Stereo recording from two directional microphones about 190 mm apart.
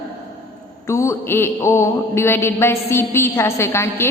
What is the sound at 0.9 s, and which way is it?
A woman's voice, 15° left (ahead or behind).